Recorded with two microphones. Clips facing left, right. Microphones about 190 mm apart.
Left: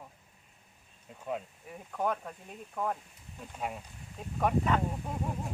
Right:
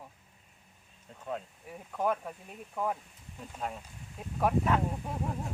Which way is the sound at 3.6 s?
10° left (ahead or behind).